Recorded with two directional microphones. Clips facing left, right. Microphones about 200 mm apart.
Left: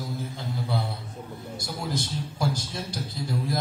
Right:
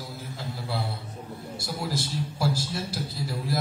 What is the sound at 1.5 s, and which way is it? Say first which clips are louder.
A man's voice: even; 5° right (ahead or behind).